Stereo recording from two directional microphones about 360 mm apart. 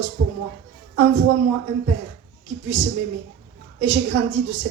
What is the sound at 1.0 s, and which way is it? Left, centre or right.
Speech, right.